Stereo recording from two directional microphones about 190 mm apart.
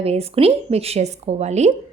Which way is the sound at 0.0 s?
30° right (ahead or behind).